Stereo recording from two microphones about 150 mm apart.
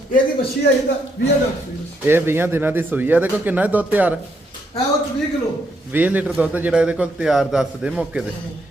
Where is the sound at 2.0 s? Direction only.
15° right (ahead or behind).